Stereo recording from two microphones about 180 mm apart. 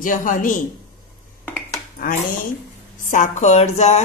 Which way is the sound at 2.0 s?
50° left (ahead or behind).